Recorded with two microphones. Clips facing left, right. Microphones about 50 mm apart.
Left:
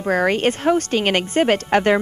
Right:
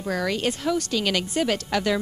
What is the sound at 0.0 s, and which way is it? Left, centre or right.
A woman's voice, left.